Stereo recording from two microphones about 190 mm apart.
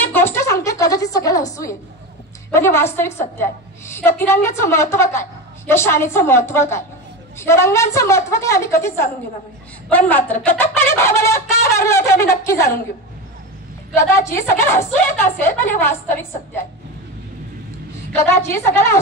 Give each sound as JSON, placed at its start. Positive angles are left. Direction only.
{"t": 0.0, "sound": "a sound", "side_deg": 10}
{"t": 2.5, "sound": "a woman's voice", "side_deg": 10}
{"t": 13.9, "sound": "a woman's voice", "side_deg": 15}
{"t": 18.1, "sound": "a woman's voice", "side_deg": 15}